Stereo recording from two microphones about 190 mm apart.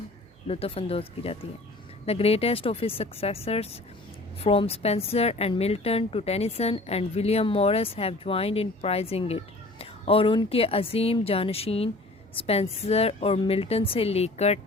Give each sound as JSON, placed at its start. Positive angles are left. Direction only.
{"t": 0.4, "sound": "a woman's voice", "side_deg": 30}